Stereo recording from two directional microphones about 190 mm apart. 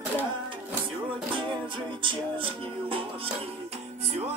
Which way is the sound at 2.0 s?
25° right (ahead or behind).